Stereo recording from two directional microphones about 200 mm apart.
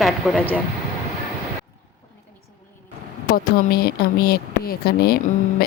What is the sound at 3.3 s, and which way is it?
Speech, 50° left (ahead or behind).